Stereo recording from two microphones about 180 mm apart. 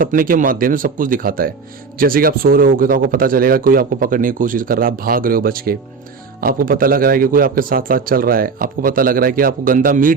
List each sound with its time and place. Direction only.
0.0 s a man's voice: 50° right (ahead or behind)